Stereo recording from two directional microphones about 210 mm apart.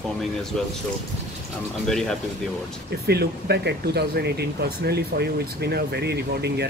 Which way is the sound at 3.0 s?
50° right (ahead or behind).